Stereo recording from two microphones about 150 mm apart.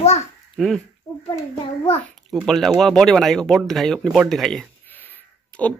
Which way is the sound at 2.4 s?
Centre (ahead or behind).